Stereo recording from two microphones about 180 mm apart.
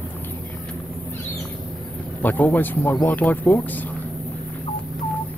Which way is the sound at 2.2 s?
10° left (ahead or behind).